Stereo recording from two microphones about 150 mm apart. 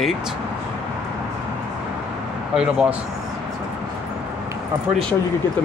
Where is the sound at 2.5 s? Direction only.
5° right (ahead or behind).